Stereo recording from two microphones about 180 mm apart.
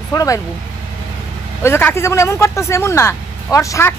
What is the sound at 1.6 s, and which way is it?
Speech, 10° left (ahead or behind).